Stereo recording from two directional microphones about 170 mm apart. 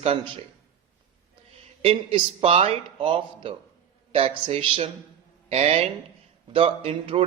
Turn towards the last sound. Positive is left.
turn(degrees=-30)  # may be behind; listen again after turning